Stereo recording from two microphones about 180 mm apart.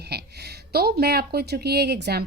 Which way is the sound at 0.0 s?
65° right (ahead or behind).